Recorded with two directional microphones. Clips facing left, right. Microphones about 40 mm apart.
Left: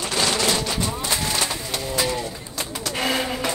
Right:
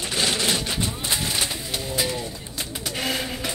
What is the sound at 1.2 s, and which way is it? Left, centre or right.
Bird, centre.